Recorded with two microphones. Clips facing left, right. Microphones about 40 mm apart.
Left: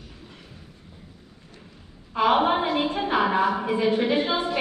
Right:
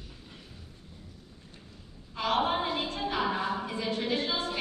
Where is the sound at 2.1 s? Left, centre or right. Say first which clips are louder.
Left 8 dB; left.